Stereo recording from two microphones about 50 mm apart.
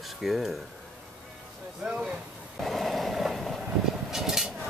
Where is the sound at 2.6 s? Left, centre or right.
Centre.